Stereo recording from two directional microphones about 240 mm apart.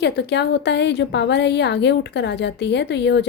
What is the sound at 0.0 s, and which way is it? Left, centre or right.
A woman's voice, left.